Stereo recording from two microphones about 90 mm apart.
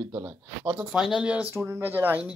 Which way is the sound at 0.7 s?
5° right (ahead or behind).